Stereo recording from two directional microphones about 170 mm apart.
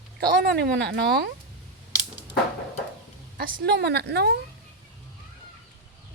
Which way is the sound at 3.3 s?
60° right (ahead or behind).